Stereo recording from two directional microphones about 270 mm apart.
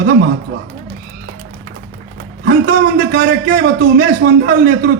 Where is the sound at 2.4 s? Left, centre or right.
Right.